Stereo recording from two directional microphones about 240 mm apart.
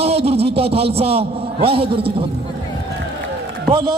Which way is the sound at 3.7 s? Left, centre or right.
Centre.